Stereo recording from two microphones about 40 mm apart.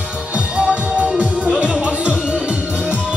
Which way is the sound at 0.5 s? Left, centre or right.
Right.